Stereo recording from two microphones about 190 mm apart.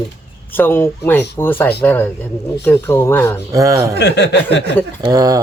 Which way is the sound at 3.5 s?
15° right (ahead or behind).